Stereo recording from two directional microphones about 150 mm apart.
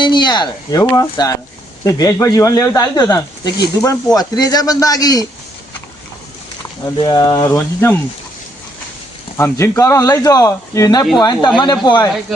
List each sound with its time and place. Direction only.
0.0 s speech: 30° left (ahead or behind)
7.0 s speech: 25° left (ahead or behind)
9.4 s speech: 20° left (ahead or behind)